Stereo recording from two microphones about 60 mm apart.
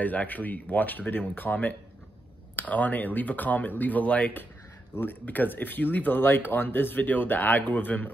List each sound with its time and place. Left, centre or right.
0.0 s speech: left